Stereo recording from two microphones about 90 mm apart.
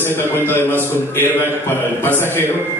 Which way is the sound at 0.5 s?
25° left (ahead or behind).